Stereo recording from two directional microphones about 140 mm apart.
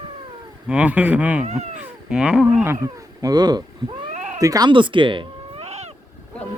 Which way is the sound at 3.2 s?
30° right (ahead or behind).